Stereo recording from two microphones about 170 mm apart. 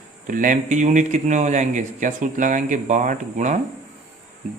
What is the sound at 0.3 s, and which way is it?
Speech, 50° right (ahead or behind).